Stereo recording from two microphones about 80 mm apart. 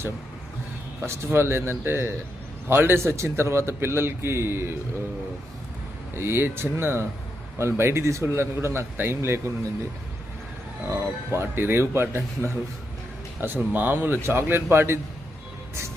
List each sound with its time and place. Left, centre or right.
1.0 s a man's voice: right
6.1 s a man's voice: right
10.8 s a man's voice: right